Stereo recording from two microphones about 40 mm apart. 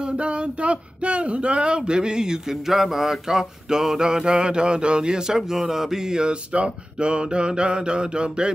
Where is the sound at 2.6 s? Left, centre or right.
Centre.